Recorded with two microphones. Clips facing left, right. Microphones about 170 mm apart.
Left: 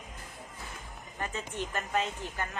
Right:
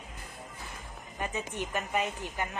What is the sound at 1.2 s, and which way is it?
Speech, 15° right (ahead or behind).